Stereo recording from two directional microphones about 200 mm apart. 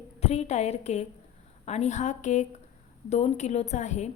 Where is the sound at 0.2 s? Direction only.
30° left (ahead or behind).